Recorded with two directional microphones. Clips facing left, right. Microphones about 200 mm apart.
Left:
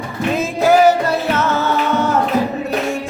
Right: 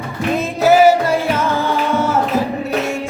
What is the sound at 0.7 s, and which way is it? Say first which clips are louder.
Music: right 1 dB; 10° right (ahead or behind).